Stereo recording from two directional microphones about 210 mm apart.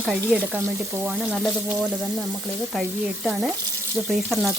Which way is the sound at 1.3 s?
Centre (ahead or behind).